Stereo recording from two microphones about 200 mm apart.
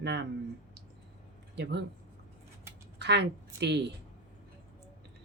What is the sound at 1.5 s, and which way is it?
Speech, 55° right (ahead or behind).